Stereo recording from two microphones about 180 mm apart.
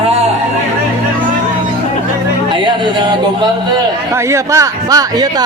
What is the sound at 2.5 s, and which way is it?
Speech, 25° right (ahead or behind).